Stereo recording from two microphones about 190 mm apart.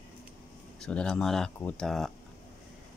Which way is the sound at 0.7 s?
5° left (ahead or behind).